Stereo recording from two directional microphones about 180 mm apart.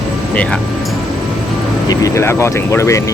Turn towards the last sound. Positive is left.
turn(degrees=15)  # may be behind; listen again after turning